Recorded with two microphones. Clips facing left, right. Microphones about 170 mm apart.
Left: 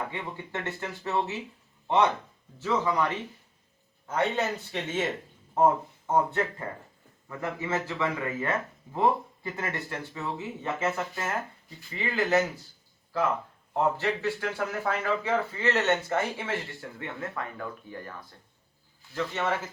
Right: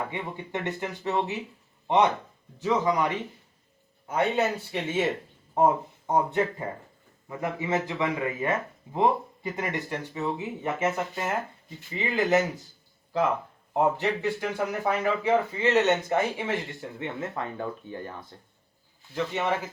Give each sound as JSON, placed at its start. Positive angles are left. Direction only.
{"t": 0.1, "sound": "speech", "side_deg": -15}
{"t": 2.6, "sound": "speech", "side_deg": -15}
{"t": 13.7, "sound": "speech", "side_deg": -15}